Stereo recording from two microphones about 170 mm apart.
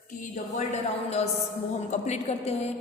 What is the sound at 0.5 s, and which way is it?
A woman's voice, 40° left (ahead or behind).